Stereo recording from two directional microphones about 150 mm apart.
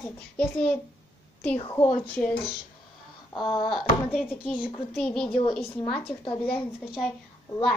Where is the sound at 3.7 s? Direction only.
Centre (ahead or behind).